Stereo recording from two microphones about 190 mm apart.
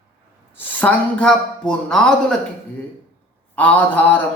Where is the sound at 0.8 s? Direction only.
5° left (ahead or behind).